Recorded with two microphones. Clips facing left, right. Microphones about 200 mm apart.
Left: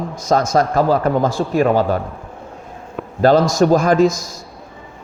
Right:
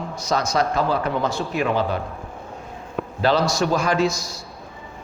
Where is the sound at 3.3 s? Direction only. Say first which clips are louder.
Left 8 dB; 50° left (ahead or behind).